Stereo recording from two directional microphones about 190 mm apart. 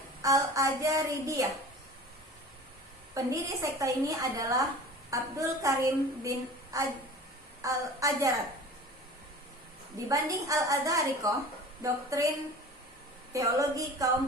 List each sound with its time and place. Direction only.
0.2 s a woman's voice: 15° right (ahead or behind)
3.2 s a woman's voice: 15° right (ahead or behind)
10.1 s a woman's voice: 15° right (ahead or behind)
13.3 s a woman's voice: 15° right (ahead or behind)